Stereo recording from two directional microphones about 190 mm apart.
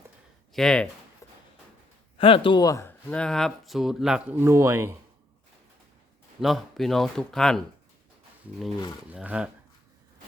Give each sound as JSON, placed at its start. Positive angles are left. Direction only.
{"t": 0.5, "sound": "speech", "side_deg": 5}
{"t": 1.2, "sound": "a sound", "side_deg": 15}
{"t": 2.1, "sound": "speech", "side_deg": 30}
{"t": 6.4, "sound": "speech", "side_deg": 0}
{"t": 9.1, "sound": "speech", "side_deg": -5}